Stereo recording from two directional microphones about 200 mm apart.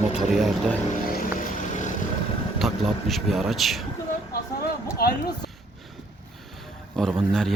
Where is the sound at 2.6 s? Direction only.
Centre (ahead or behind).